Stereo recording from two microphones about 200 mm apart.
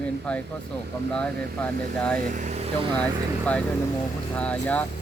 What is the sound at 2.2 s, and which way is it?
Speech, 40° right (ahead or behind).